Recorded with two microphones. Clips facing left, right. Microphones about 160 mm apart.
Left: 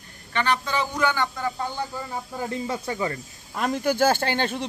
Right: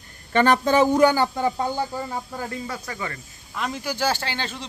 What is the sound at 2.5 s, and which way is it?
Speech, 25° left (ahead or behind).